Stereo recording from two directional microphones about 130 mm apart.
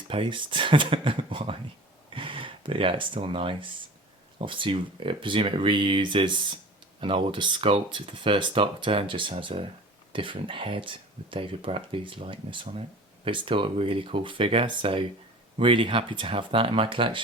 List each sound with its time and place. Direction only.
0.1 s speech: 40° right (ahead or behind)